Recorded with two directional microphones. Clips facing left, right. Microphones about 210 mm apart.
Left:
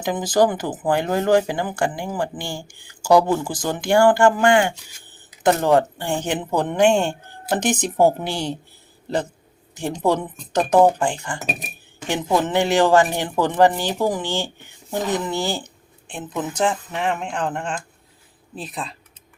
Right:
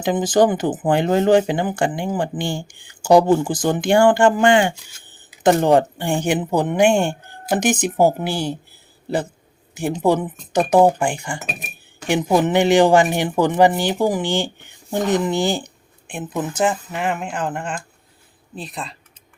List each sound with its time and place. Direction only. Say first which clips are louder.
0.0 s speech: right 2 dB; 25° right (ahead or behind); by 8.5 s 5° right (ahead or behind)
9.7 s speech: right 3 dB; 10° right (ahead or behind)